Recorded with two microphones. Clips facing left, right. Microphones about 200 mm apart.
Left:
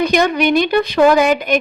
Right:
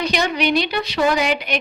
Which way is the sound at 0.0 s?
50° left (ahead or behind).